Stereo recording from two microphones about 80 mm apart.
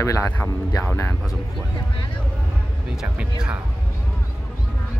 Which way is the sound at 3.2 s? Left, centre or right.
Centre.